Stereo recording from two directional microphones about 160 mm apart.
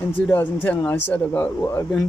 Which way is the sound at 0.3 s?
10° left (ahead or behind).